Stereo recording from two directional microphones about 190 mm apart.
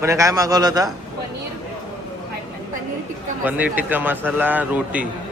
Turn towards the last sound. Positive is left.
turn(degrees=-5)  # may be behind; listen again after turning